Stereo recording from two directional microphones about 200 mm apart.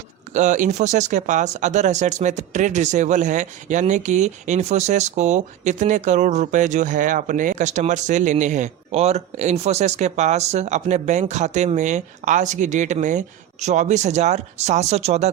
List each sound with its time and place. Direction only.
0.3 s speech: 40° right (ahead or behind)